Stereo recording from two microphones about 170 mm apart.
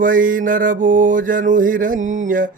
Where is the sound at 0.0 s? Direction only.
55° right (ahead or behind).